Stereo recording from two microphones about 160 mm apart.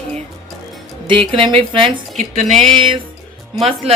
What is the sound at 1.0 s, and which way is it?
Speech, 35° right (ahead or behind).